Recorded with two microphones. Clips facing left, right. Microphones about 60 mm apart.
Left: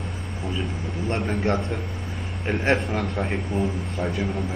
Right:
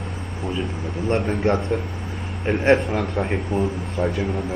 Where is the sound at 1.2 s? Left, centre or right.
Centre.